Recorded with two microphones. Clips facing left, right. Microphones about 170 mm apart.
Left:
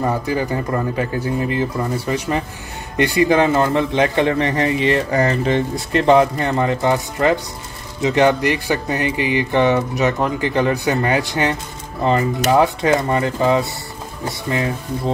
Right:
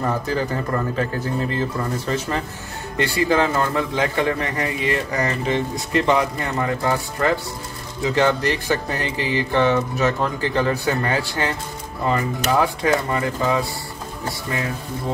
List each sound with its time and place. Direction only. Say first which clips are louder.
0.0 s a man's voice: left 3 dB; 10° left (ahead or behind)